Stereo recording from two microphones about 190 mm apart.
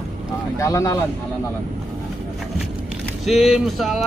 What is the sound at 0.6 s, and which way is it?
Speech, 15° left (ahead or behind).